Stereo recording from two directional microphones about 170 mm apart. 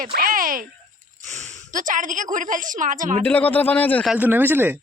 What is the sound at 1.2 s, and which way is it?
A woman's voice, 45° right (ahead or behind).